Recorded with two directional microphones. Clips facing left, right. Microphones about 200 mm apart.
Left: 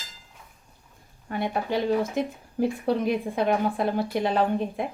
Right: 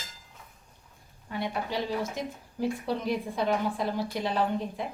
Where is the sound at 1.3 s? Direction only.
55° left (ahead or behind).